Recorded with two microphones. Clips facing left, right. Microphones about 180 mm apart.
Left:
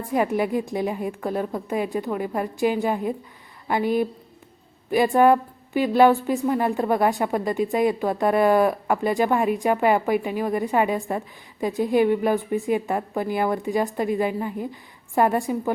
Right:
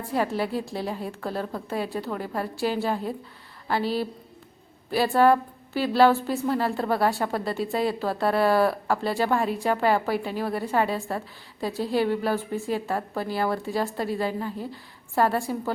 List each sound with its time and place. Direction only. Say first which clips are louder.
0.1 s a woman's voice: left 4 dB; 15° left (ahead or behind)